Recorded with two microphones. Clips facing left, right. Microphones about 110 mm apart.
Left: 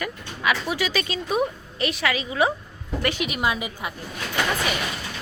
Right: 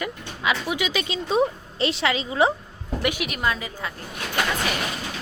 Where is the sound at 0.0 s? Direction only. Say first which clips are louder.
Left 1 dB; 20° right (ahead or behind).